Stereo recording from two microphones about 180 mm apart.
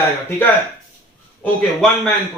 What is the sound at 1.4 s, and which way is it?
Speech, 5° left (ahead or behind).